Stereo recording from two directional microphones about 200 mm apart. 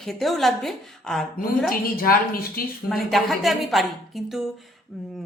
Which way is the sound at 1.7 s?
45° left (ahead or behind).